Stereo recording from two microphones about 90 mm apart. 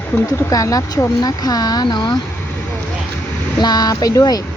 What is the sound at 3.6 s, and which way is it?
Speech, 45° left (ahead or behind).